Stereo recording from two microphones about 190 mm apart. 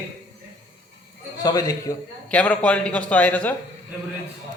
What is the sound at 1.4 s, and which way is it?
Speech, 20° left (ahead or behind).